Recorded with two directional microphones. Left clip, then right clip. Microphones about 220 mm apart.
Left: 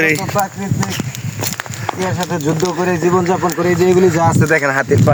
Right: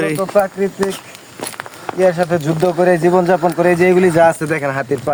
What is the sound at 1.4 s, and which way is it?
Walk, 50° left (ahead or behind).